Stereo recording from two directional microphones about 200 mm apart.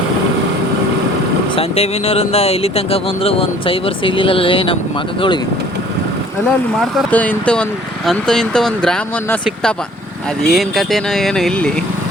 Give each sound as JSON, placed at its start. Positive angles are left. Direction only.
{"t": 1.5, "sound": "speech", "side_deg": 30}
{"t": 6.7, "sound": "speech", "side_deg": 5}